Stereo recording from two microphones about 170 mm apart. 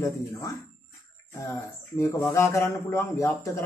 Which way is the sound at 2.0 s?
15° left (ahead or behind).